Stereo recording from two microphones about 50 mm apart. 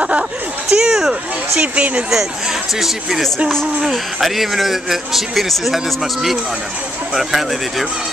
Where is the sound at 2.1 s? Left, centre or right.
Centre.